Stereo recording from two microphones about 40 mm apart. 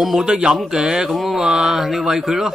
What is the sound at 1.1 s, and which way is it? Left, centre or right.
Speech, centre.